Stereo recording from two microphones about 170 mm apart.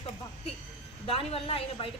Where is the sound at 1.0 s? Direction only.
35° left (ahead or behind).